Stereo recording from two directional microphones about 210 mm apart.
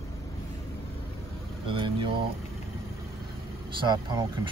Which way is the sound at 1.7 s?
25° right (ahead or behind).